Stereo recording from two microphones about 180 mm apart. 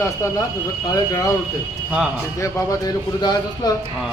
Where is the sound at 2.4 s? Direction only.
15° left (ahead or behind).